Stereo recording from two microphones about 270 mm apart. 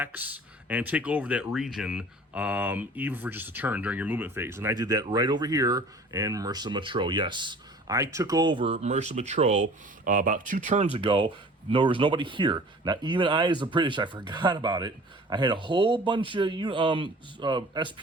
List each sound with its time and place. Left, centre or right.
0.0 s speech: centre